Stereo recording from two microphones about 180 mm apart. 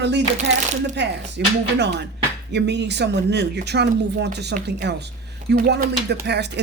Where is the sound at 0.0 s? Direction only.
70° right (ahead or behind).